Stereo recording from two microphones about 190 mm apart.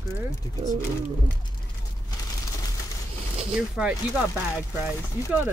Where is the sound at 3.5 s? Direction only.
5° right (ahead or behind).